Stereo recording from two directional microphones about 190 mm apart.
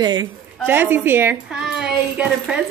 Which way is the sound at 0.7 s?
10° right (ahead or behind).